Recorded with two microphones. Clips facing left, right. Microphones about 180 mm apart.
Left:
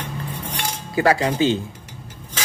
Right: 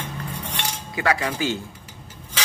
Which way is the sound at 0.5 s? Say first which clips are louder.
Left 8 dB; 35° left (ahead or behind).